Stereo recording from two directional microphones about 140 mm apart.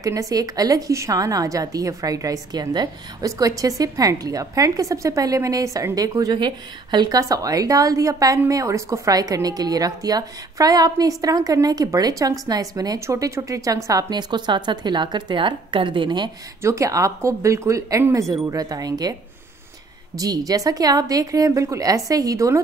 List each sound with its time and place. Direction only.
0.0 s a woman's voice: 25° right (ahead or behind)
16.6 s a woman's voice: 20° right (ahead or behind)
20.2 s a woman's voice: 25° right (ahead or behind)